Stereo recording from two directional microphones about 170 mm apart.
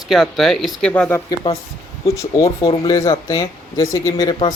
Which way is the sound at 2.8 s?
20° left (ahead or behind).